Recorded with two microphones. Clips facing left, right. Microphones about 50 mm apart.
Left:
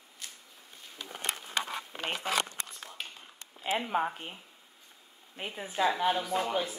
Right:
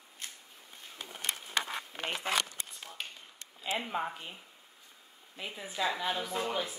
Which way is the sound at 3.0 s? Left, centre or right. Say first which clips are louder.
Even; centre.